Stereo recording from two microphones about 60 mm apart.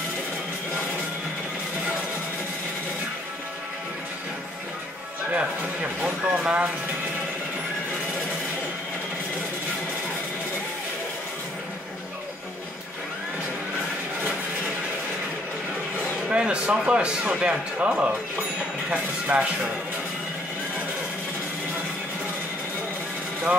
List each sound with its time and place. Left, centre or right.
6.0 s speech: centre
16.3 s a man's voice: centre
19.3 s speech: right